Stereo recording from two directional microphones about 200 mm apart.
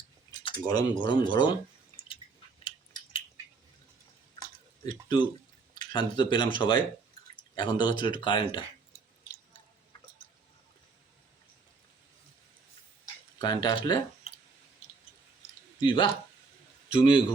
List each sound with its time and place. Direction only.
0.3 s speech: 20° left (ahead or behind)
2.6 s a sound: 25° left (ahead or behind)
5.0 s speech: 20° left (ahead or behind)
13.4 s speech: 20° left (ahead or behind)
15.8 s speech: 25° left (ahead or behind)